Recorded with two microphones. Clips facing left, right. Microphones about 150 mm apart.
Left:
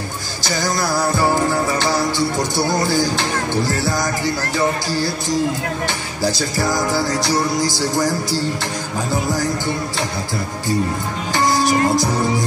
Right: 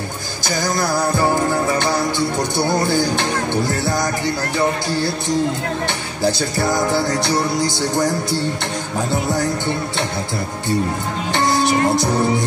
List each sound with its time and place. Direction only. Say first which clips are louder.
0.5 s music: even; 50° right (ahead or behind)
0.9 s music: even; 20° right (ahead or behind)
2.8 s music: even; 55° right (ahead or behind)
3.6 s music: even; 25° right (ahead or behind)
6.6 s music: right 1 dB; 25° right (ahead or behind)
7.1 s music: even; 60° right (ahead or behind)
11.5 s music: even; 25° right (ahead or behind)